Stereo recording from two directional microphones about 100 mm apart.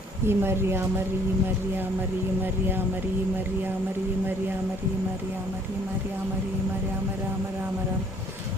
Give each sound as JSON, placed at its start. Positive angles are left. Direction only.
{"t": 0.3, "sound": "speech", "side_deg": -25}
{"t": 2.4, "sound": "speech", "side_deg": -20}